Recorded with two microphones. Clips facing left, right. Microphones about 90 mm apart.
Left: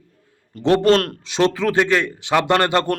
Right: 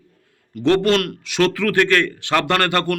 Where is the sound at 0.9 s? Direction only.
35° left (ahead or behind).